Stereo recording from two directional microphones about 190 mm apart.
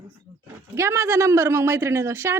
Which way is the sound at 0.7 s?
15° right (ahead or behind).